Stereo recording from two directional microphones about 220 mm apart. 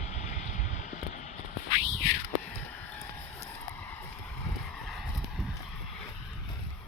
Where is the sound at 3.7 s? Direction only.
10° left (ahead or behind).